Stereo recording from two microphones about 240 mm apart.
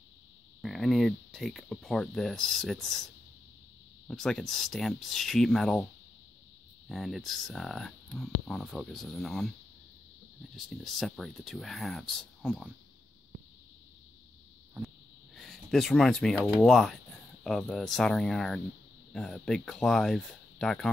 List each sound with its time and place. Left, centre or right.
0.6 s speech: centre
4.1 s speech: centre
6.9 s speech: centre
10.5 s speech: centre
15.3 s speech: centre